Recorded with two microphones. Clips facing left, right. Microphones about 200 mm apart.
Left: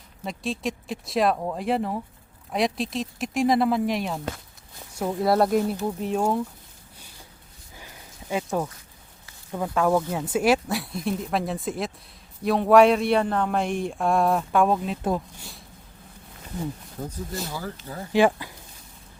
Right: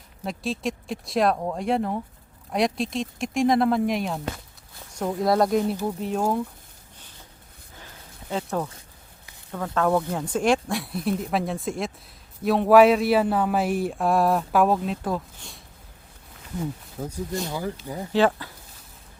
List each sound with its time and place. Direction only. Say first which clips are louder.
0.3 s speech: right 1 dB; centre (ahead or behind)
7.8 s a sound: left 1 dB; 10° left (ahead or behind)
9.5 s speech: left 1 dB; 15° left (ahead or behind)
17.0 s speech: right 3 dB; centre (ahead or behind)
17.5 s speech: right 4 dB; 15° right (ahead or behind)
18.1 s speech: left 1 dB; 15° left (ahead or behind)